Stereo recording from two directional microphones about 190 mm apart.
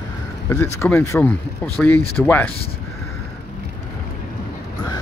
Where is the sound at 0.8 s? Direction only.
10° left (ahead or behind).